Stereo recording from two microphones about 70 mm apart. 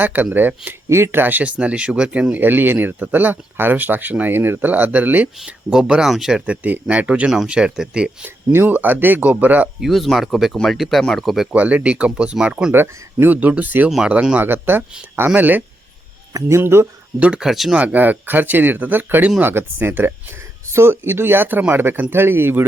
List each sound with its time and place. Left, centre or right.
0.0 s speech: right
5.5 s speech: centre
8.5 s speech: right
9.8 s speech: centre
11.5 s speech: centre
12.7 s speech: right; by 14.4 s centre
14.4 s speech: right
16.5 s speech: right
16.8 s speech: centre
17.5 s speech: centre
17.7 s speech: right